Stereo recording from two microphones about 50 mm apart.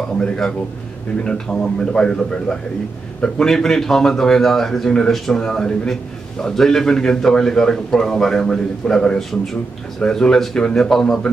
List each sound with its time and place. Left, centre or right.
1.2 s a man's voice: centre